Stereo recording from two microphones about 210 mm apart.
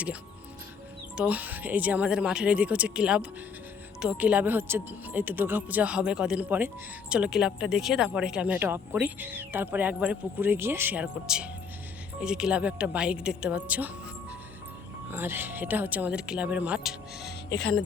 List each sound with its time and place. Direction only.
1.1 s speech: 5° right (ahead or behind)
15.1 s speech: 10° right (ahead or behind)
17.5 s speech: 55° left (ahead or behind)